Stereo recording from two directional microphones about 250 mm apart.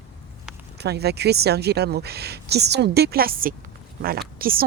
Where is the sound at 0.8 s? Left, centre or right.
Right.